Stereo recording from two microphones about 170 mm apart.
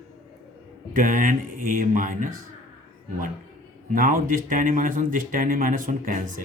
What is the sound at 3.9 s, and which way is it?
Speech, 55° right (ahead or behind).